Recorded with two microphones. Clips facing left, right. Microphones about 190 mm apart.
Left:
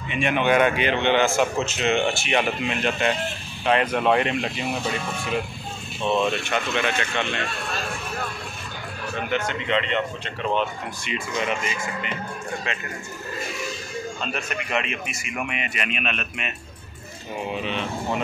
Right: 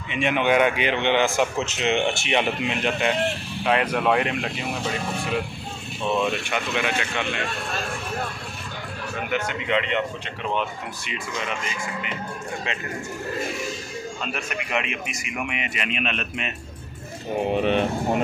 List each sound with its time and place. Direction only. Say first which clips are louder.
0.1 s a man's voice: even; 20° right (ahead or behind); by 4.6 s 5° right (ahead or behind)
6.0 s a man's voice: left 1 dB; 5° right (ahead or behind)
9.3 s a man's voice: even; 10° right (ahead or behind)
11.1 s speech: left 5 dB; 5° left (ahead or behind)
14.2 s a man's voice: left 1 dB; 10° right (ahead or behind); by 16.5 s 30° right (ahead or behind)
17.4 s speech: right 7 dB; 55° right (ahead or behind)